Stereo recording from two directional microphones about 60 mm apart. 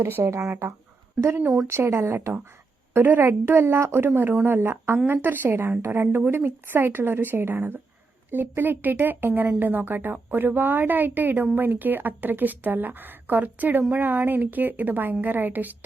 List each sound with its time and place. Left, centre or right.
0.2 s a woman's voice: right
0.4 s a woman's voice: right
1.6 s a woman's voice: right
2.9 s a woman's voice: right
3.2 s a woman's voice: right